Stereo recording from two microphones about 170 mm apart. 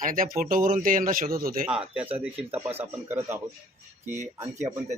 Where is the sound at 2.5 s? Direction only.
10° right (ahead or behind).